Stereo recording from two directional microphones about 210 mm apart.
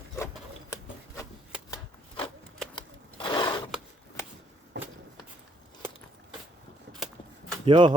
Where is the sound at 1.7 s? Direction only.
25° left (ahead or behind).